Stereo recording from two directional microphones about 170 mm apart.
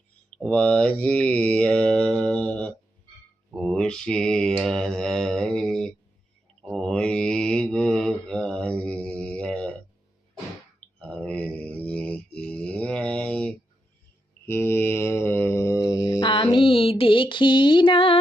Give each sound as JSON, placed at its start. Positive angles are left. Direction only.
{"t": 0.3, "sound": "mantra", "side_deg": 5}
{"t": 11.0, "sound": "mantra", "side_deg": 5}